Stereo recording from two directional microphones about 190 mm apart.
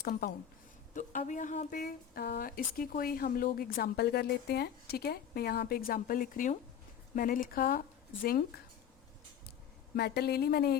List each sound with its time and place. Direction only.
0.0 s speech: 55° left (ahead or behind)
0.9 s speech: 40° left (ahead or behind)
9.9 s a woman's voice: 55° left (ahead or behind)